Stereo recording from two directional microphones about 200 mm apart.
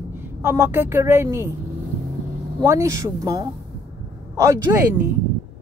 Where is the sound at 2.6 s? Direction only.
15° right (ahead or behind).